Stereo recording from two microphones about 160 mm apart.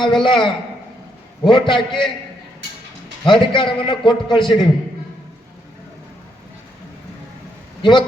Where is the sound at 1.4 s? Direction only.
30° left (ahead or behind).